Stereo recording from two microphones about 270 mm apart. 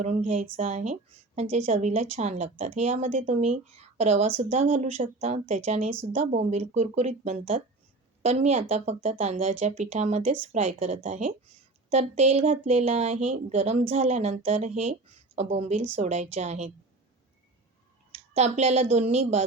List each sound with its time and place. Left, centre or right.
0.0 s a woman's voice: right
18.3 s a woman's voice: right